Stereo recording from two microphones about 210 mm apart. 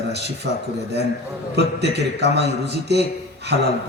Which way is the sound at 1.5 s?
55° right (ahead or behind).